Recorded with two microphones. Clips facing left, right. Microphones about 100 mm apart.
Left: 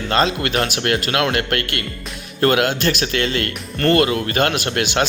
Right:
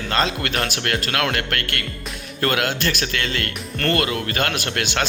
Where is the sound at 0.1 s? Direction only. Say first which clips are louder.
Left 4 dB; 25° left (ahead or behind).